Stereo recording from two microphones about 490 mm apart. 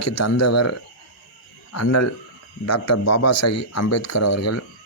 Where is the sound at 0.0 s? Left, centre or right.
Left.